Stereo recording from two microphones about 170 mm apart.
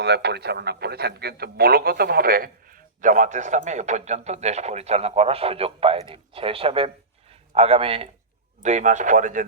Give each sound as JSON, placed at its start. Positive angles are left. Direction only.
{"t": 0.0, "sound": "a man's voice", "side_deg": -80}
{"t": 8.6, "sound": "a man's voice", "side_deg": -45}